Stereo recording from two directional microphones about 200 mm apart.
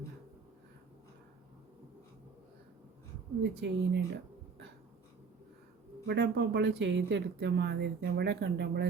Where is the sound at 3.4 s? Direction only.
60° right (ahead or behind).